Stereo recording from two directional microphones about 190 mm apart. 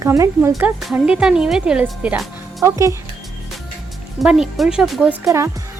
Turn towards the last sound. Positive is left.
turn(degrees=0)  # may be behind; listen again after turning